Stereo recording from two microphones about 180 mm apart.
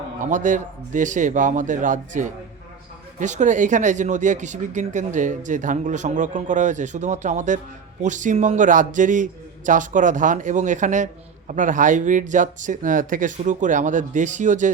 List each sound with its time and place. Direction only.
0.3 s a man's voice: 45° right (ahead or behind)